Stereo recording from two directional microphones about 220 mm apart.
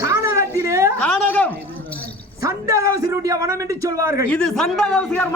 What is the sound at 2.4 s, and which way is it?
A man's voice, 15° right (ahead or behind).